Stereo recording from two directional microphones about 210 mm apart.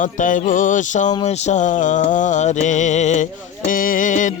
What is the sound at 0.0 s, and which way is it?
Music, 35° left (ahead or behind).